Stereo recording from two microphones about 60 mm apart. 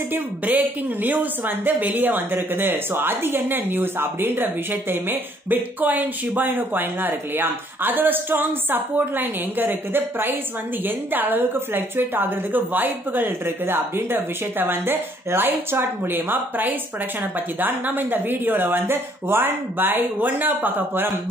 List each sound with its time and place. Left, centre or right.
0.1 s a woman's voice: right